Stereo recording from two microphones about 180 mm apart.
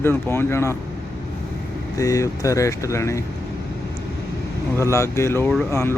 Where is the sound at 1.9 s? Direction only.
20° left (ahead or behind).